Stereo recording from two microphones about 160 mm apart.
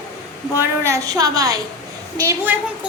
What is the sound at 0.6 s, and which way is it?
A woman's voice, 15° right (ahead or behind).